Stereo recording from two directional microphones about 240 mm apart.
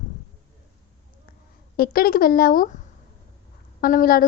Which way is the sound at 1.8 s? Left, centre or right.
Left.